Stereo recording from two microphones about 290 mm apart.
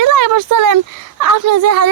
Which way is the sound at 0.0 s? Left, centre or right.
Right.